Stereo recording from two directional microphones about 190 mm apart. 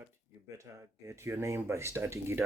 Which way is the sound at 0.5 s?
15° right (ahead or behind).